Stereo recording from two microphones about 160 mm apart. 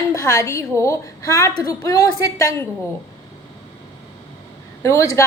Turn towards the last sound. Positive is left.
turn(degrees=20)  # may be behind; listen again after turning